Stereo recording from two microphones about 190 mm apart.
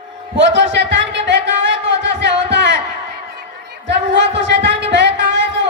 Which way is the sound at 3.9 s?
70° right (ahead or behind).